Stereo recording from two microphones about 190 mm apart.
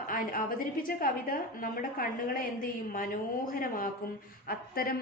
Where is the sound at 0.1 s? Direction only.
50° left (ahead or behind).